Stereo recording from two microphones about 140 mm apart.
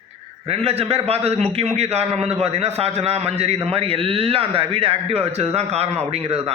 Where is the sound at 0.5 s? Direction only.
45° right (ahead or behind).